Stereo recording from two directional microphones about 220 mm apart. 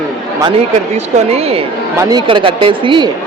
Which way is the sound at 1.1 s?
30° right (ahead or behind).